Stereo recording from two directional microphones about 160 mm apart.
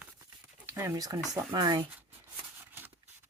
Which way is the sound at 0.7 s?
15° right (ahead or behind).